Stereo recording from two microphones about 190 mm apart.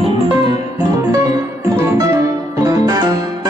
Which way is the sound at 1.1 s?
15° right (ahead or behind).